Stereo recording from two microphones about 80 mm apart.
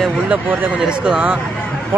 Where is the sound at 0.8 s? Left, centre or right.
Centre.